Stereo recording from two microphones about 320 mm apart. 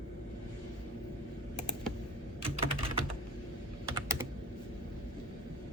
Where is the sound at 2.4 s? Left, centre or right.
Centre.